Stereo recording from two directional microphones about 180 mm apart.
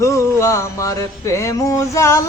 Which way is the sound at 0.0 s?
15° left (ahead or behind).